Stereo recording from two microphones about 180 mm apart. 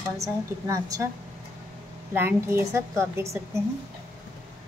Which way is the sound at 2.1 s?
15° right (ahead or behind).